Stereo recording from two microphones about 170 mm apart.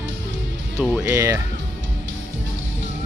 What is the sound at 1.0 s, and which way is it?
Speech, 20° right (ahead or behind).